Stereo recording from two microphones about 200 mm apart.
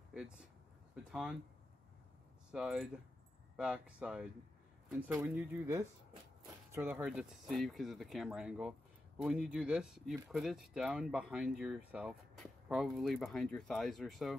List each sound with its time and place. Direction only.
0.1 s speech: 5° right (ahead or behind)
2.5 s speech: centre (ahead or behind)